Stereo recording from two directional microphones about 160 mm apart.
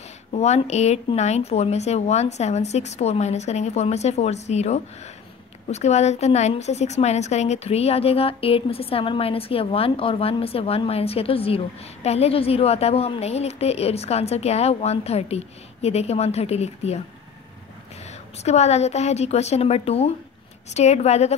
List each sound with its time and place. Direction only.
0.3 s a woman's voice: 45° left (ahead or behind)
18.0 s speech: 45° left (ahead or behind)